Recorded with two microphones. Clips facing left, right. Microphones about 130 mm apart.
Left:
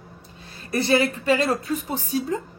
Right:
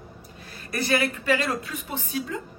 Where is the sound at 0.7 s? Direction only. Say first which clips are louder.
Left 4 dB; 30° left (ahead or behind).